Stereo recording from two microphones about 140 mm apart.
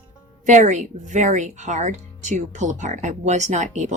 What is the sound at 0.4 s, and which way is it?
Speech, 60° right (ahead or behind).